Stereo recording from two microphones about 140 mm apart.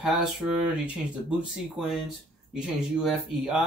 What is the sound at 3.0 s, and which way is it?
Speech, centre (ahead or behind).